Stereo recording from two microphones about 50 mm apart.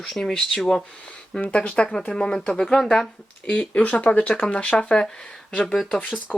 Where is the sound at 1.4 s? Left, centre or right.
Left.